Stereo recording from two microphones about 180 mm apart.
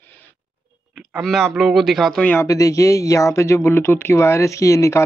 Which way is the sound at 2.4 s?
20° left (ahead or behind).